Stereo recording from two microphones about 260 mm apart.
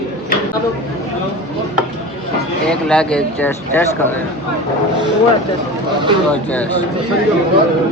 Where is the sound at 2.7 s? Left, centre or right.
Centre.